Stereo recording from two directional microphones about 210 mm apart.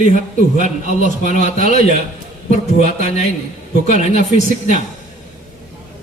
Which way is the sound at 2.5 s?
35° left (ahead or behind).